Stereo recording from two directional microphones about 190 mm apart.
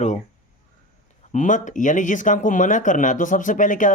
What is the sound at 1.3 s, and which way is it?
Speech, 40° left (ahead or behind).